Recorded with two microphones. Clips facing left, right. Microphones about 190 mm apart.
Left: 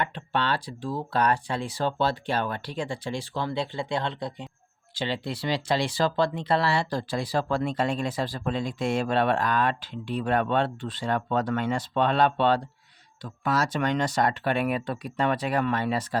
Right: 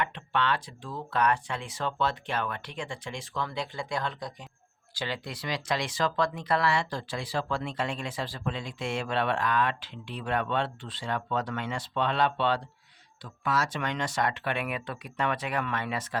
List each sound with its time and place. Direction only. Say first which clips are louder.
0.0 s speech: left 2 dB; 35° left (ahead or behind)